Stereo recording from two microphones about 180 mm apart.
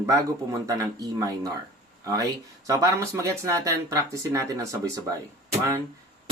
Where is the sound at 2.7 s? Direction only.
20° right (ahead or behind).